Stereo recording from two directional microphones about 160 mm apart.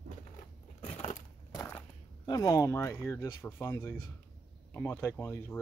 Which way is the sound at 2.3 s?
20° left (ahead or behind).